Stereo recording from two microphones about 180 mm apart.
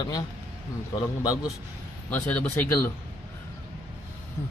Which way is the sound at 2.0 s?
10° left (ahead or behind).